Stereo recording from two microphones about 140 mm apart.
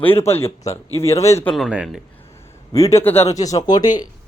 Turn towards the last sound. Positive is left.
turn(degrees=30)  # may be behind; listen again after turning